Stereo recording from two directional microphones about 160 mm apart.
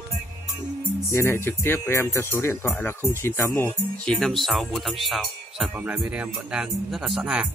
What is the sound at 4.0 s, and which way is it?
Music, 5° left (ahead or behind).